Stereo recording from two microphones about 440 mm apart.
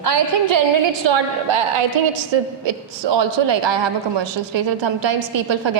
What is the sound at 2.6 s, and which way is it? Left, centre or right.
A man's voice, right.